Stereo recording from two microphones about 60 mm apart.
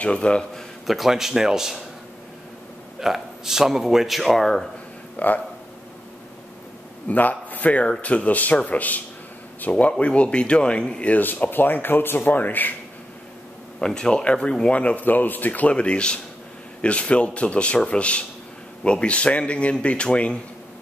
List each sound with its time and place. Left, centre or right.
0.0 s a man's voice: centre
0.8 s speech: centre
3.0 s speech: centre
5.2 s speech: left
7.1 s a man's voice: left
13.7 s speech: centre